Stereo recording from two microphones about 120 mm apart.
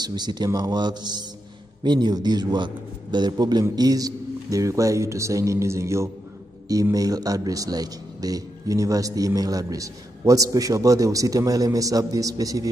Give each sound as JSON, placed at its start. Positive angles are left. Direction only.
{"t": 0.0, "sound": "a man's voice", "side_deg": -35}